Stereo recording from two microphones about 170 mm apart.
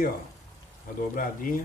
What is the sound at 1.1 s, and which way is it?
Speech, 55° left (ahead or behind).